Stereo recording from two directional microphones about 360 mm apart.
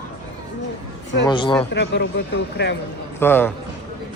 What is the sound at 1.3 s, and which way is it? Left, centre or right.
Speech, centre.